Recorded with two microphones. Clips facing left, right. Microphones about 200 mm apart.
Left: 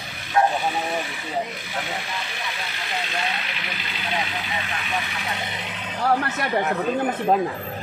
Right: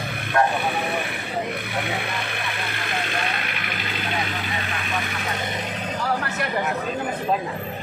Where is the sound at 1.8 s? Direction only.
60° right (ahead or behind).